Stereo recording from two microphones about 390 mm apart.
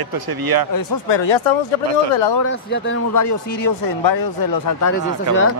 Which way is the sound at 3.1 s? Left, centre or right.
Left.